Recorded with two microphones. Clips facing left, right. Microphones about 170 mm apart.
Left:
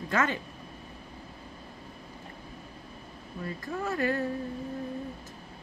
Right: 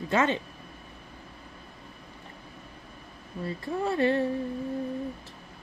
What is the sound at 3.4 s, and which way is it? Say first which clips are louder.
Speech: right 4 dB; 30° right (ahead or behind).